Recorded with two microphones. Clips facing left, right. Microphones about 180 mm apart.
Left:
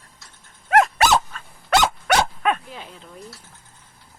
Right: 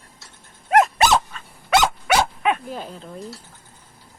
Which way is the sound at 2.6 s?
40° right (ahead or behind).